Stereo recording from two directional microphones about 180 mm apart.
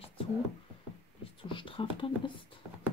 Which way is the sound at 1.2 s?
30° left (ahead or behind).